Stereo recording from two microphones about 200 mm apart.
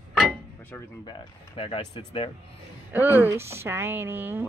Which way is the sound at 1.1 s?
25° left (ahead or behind).